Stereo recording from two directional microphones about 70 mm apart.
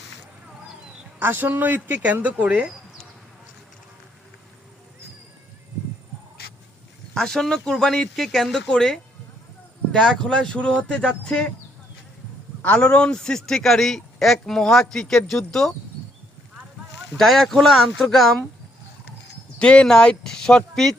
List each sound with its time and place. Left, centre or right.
1.2 s speech: right
7.1 s a man's voice: centre
12.6 s a man's voice: left
17.2 s speech: centre
19.5 s speech: centre